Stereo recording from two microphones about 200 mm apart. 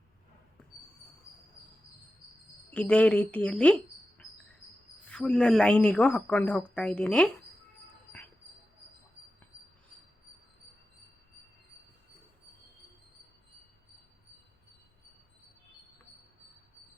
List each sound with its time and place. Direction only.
2.7 s a woman's voice: 5° left (ahead or behind)
4.2 s cricket: 5° left (ahead or behind)
5.0 s a woman's voice: 5° left (ahead or behind)